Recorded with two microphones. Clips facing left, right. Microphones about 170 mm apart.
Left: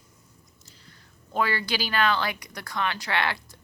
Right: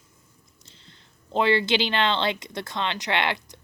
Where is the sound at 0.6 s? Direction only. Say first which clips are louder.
Right 1 dB; 25° right (ahead or behind).